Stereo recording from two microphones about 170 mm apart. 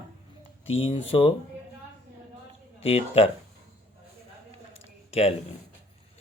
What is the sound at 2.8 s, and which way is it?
Speech, 35° left (ahead or behind).